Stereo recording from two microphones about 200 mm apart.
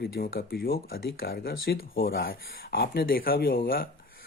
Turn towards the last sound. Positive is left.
turn(degrees=45)  # may be behind; listen again after turning